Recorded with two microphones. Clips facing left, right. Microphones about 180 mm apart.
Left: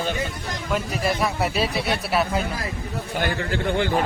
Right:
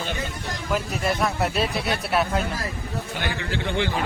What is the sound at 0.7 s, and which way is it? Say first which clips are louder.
Speech: left 1 dB; centre (ahead or behind).